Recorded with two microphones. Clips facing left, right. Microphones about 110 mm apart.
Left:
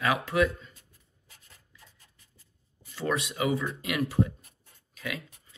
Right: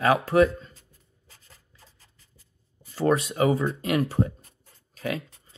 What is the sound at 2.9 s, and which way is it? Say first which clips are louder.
Speech: right 7 dB; 35° right (ahead or behind).